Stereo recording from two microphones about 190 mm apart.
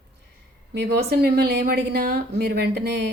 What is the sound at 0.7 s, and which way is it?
A woman's voice, 60° right (ahead or behind).